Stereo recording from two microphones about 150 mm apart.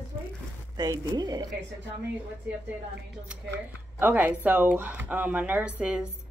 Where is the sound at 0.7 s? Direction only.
25° right (ahead or behind).